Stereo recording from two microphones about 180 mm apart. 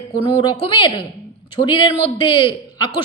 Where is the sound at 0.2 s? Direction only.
30° left (ahead or behind).